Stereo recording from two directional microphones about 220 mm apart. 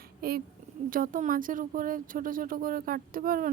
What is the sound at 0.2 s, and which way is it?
A woman's voice, 45° right (ahead or behind).